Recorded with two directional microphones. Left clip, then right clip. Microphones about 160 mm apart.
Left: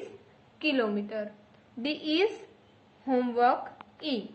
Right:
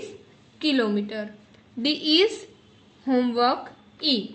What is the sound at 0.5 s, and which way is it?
A woman's voice, 35° right (ahead or behind).